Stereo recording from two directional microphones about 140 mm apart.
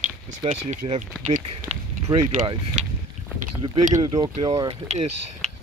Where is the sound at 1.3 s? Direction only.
55° right (ahead or behind).